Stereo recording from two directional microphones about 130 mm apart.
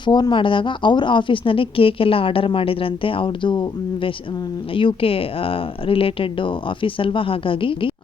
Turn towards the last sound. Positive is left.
turn(degrees=45)  # may be behind; listen again after turning